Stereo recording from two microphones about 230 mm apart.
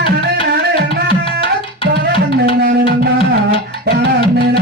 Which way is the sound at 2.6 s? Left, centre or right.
Right.